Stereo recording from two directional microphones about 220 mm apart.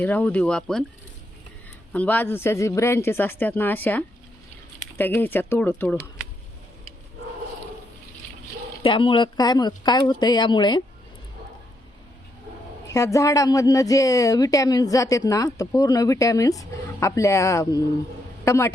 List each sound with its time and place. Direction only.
0.0 s speech: 5° left (ahead or behind)
1.9 s speech: 5° left (ahead or behind)
8.8 s speech: 25° left (ahead or behind)
12.9 s speech: 15° left (ahead or behind)